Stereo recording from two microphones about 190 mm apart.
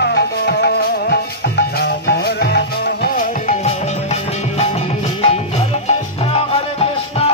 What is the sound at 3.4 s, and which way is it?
Music, 35° left (ahead or behind).